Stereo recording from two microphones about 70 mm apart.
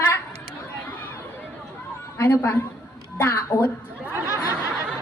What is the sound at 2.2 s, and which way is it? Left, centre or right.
A woman's voice, left.